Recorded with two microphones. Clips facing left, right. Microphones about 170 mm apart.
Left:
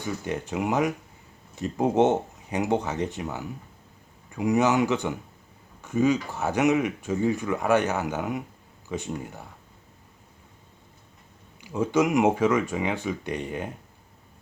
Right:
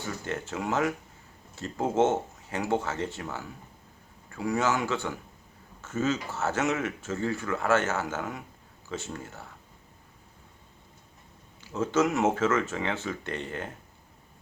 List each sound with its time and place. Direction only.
0.0 s speech: 15° left (ahead or behind)
11.6 s speech: 15° left (ahead or behind)